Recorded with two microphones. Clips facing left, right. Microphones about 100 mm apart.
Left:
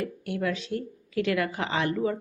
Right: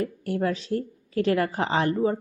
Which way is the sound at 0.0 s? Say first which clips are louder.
Right 3 dB; 35° right (ahead or behind).